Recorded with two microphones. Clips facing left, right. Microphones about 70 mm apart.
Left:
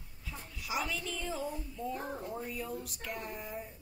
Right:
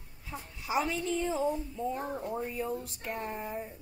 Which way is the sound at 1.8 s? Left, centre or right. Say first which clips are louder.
Right 4 dB; right.